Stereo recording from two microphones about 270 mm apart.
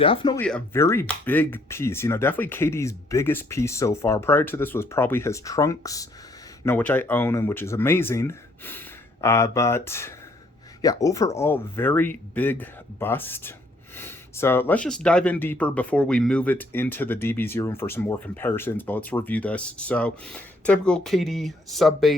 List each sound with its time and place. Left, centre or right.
0.0 s speech: centre
0.4 s speech: centre